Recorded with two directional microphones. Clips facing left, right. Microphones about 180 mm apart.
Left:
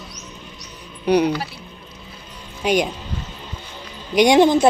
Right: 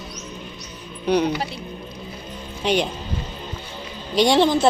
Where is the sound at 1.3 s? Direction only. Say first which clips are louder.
Left 1 dB; 20° right (ahead or behind).